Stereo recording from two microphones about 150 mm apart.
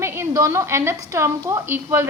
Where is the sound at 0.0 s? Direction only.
15° right (ahead or behind).